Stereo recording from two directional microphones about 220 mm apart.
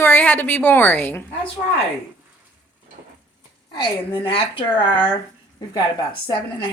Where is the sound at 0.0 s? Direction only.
10° left (ahead or behind).